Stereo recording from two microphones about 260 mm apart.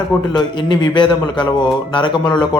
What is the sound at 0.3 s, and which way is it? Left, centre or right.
A man's voice, centre.